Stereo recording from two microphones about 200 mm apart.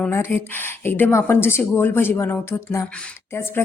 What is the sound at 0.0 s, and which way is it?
A woman's voice, 10° left (ahead or behind).